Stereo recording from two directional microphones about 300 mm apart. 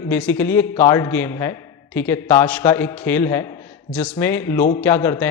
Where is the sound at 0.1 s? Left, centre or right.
Centre.